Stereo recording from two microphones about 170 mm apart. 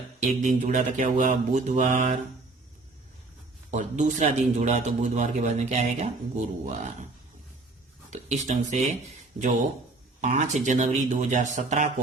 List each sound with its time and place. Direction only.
0.4 s a man's voice: 45° right (ahead or behind)
3.7 s a man's voice: 45° right (ahead or behind)
8.1 s a man's voice: 40° right (ahead or behind)
10.2 s a man's voice: 45° right (ahead or behind)